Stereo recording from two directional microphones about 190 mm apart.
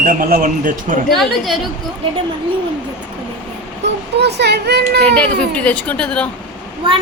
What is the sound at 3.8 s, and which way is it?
A child's voice, 60° right (ahead or behind).